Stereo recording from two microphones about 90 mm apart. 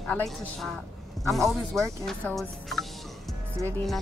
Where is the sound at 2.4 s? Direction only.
Centre (ahead or behind).